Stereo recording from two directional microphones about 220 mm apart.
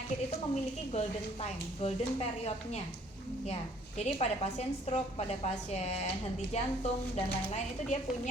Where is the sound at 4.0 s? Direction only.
30° left (ahead or behind).